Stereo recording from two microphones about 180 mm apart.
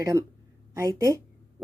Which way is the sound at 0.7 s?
20° right (ahead or behind).